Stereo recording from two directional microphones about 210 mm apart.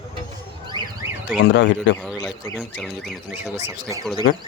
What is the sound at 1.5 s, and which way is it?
Speech, 60° left (ahead or behind).